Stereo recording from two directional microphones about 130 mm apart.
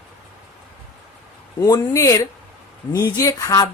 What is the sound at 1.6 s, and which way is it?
Speech, 25° left (ahead or behind).